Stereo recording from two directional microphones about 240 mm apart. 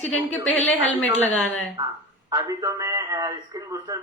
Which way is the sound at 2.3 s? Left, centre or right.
Centre.